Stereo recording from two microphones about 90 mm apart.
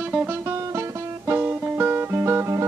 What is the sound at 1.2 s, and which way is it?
Music, 20° right (ahead or behind).